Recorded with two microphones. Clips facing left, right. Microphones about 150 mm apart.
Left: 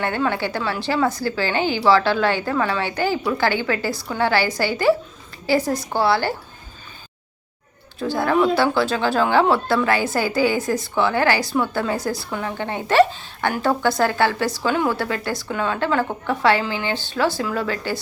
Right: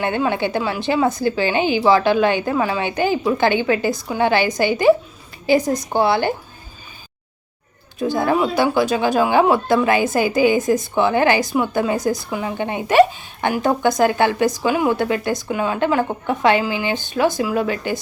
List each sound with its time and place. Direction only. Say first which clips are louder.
0.0 s a woman's voice: right 2 dB; 20° right (ahead or behind)
7.9 s speech: right 1 dB; 20° right (ahead or behind)